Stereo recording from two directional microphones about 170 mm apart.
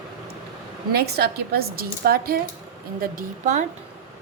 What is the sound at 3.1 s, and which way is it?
Speech, 45° right (ahead or behind).